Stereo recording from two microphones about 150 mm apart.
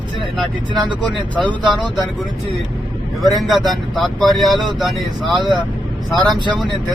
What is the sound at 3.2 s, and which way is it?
Speech, centre (ahead or behind).